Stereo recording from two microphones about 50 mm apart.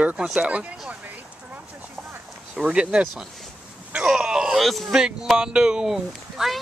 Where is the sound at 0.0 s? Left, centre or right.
Centre.